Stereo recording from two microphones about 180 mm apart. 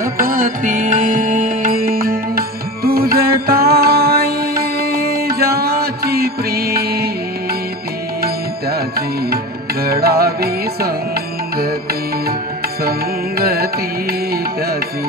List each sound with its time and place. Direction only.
0.0 s music: 50° right (ahead or behind)
8.2 s music: 60° right (ahead or behind)
13.4 s carnatic music: 60° right (ahead or behind)